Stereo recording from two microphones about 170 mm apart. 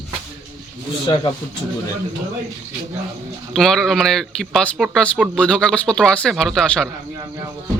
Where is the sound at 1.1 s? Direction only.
25° left (ahead or behind).